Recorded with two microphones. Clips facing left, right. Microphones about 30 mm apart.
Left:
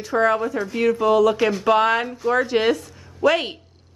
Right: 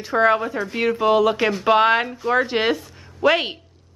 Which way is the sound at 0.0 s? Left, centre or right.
Right.